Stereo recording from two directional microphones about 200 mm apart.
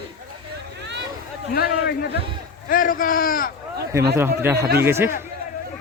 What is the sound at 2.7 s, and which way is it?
Speech, 45° left (ahead or behind).